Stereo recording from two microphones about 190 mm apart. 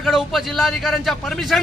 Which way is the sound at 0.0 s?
Centre (ahead or behind).